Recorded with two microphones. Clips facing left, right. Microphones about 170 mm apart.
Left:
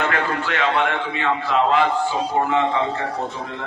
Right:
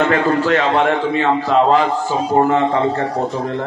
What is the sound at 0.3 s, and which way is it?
A man's voice, 40° right (ahead or behind).